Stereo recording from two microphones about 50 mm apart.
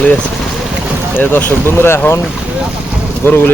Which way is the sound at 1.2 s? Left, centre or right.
Left.